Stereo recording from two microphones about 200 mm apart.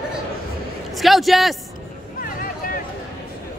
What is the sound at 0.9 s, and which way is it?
Speech, centre (ahead or behind).